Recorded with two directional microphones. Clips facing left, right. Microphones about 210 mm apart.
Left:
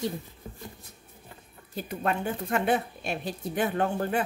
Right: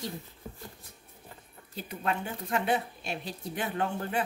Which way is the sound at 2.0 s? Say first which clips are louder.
Left 4 dB; 50° left (ahead or behind).